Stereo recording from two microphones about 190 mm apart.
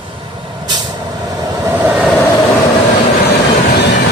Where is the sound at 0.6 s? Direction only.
20° right (ahead or behind).